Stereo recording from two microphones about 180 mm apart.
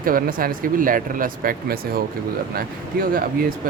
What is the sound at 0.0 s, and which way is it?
Speech, 50° right (ahead or behind).